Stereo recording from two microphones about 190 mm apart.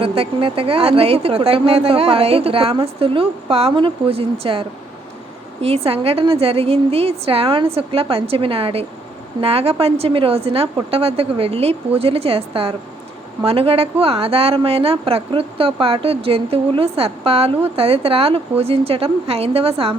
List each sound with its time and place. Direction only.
0.0 s speech: 30° right (ahead or behind)
5.6 s speech: 30° right (ahead or behind)